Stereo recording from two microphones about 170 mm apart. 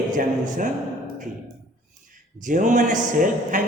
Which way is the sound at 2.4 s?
50° right (ahead or behind).